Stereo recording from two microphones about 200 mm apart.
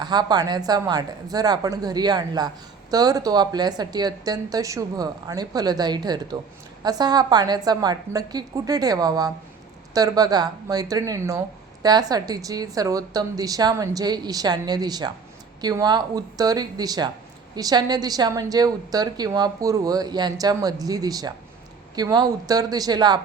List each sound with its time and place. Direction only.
0.0 s speech: 20° right (ahead or behind)